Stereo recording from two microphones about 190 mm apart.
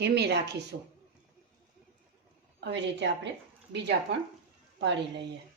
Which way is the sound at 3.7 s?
65° right (ahead or behind).